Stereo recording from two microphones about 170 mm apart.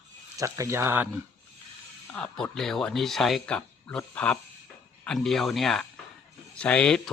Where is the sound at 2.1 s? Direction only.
5° left (ahead or behind).